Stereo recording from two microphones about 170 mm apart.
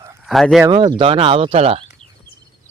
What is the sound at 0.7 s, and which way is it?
Speech, 30° right (ahead or behind).